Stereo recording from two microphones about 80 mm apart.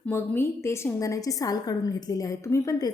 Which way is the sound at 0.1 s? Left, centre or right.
Left.